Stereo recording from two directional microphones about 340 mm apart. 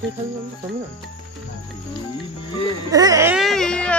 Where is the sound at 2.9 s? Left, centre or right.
Centre.